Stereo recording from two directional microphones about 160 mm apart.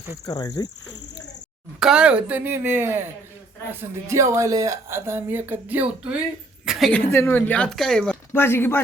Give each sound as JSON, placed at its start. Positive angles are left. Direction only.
{"t": 0.3, "sound": "speech", "side_deg": 25}
{"t": 1.8, "sound": "a woman's voice", "side_deg": -5}
{"t": 6.7, "sound": "a sound", "side_deg": 0}
{"t": 7.1, "sound": "speech", "side_deg": 15}